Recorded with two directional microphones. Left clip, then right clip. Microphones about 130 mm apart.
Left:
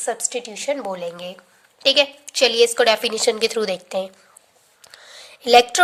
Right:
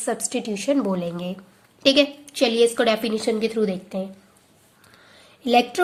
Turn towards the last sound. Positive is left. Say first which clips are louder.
# left 6 dB
turn(degrees=60)  # may be behind; listen again after turning